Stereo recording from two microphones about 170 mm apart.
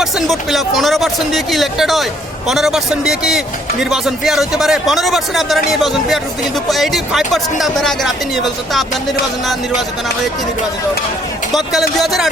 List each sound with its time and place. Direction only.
0.0 s a man's voice: centre (ahead or behind)
11.5 s a man's voice: centre (ahead or behind)